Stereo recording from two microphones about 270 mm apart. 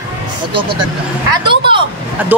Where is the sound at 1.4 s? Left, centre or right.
Centre.